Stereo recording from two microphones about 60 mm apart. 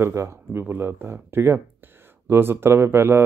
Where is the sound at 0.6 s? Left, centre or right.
Right.